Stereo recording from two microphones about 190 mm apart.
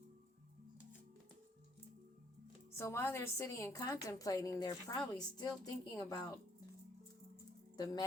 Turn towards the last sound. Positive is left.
turn(degrees=20)  # may be behind; listen again after turning